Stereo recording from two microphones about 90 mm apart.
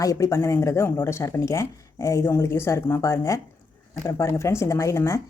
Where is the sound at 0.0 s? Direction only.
40° left (ahead or behind).